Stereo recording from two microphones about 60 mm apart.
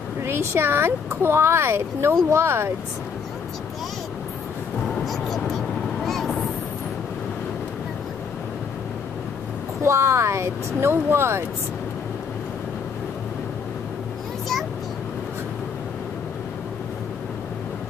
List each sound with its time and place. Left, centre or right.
0.2 s speech: right
6.0 s vehicle: centre
9.8 s speech: right